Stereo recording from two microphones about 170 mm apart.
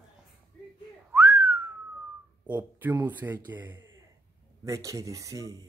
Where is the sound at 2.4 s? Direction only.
10° right (ahead or behind).